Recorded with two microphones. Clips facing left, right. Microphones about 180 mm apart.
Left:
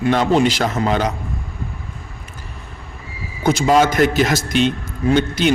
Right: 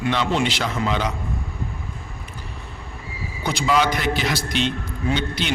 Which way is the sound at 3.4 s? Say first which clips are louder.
Left 6 dB; 45° left (ahead or behind).